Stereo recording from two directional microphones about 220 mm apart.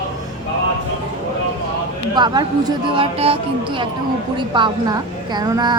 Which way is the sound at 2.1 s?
20° right (ahead or behind).